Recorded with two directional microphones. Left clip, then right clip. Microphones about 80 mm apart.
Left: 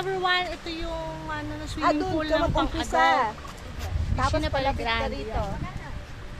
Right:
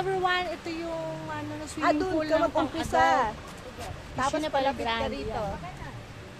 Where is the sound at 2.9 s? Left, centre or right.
Left.